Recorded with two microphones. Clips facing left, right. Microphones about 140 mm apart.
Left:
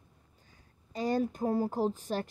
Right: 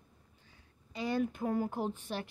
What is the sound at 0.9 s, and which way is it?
A woman's voice, 40° left (ahead or behind).